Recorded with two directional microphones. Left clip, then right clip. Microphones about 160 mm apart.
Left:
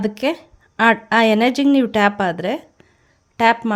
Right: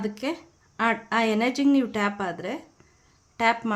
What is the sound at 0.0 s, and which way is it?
A woman's voice, 50° left (ahead or behind).